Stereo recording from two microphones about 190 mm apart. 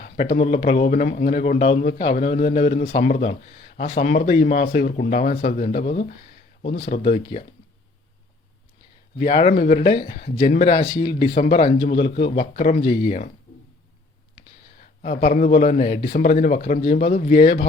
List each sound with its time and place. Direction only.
0.2 s speech: 30° left (ahead or behind)
6.6 s speech: 30° left (ahead or behind)
9.1 s a man's voice: 30° left (ahead or behind)
12.8 s a man's voice: 25° left (ahead or behind)
15.2 s a man's voice: 40° left (ahead or behind)